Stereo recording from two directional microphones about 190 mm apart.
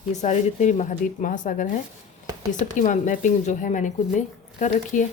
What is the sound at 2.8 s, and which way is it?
Speech, 40° left (ahead or behind).